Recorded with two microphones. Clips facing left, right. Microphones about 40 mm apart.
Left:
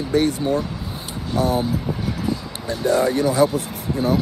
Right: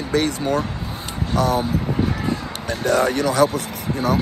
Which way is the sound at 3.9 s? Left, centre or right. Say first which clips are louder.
Left 1 dB; right.